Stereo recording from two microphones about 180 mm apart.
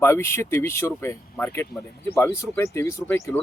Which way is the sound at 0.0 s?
15° left (ahead or behind).